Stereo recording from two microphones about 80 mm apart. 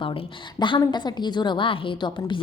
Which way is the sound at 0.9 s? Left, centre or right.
Left.